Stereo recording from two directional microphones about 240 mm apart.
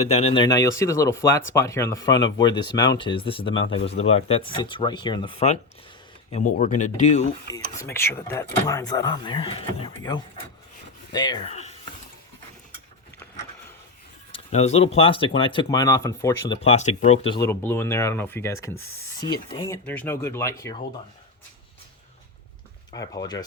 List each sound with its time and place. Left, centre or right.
0.0 s speech: left
7.9 s speech: centre; by 11.7 s left
14.3 s speech: left
16.6 s speech: left; by 20.8 s centre
22.9 s speech: centre